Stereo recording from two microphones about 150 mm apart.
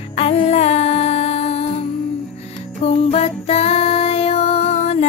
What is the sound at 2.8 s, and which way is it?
Music, 45° left (ahead or behind).